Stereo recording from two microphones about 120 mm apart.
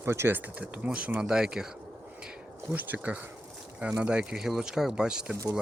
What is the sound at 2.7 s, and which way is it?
Speech, 15° right (ahead or behind).